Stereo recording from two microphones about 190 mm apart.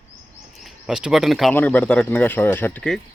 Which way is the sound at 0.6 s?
5° right (ahead or behind).